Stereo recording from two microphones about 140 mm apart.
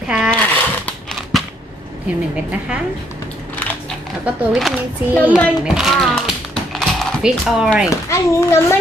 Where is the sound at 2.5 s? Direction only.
10° right (ahead or behind).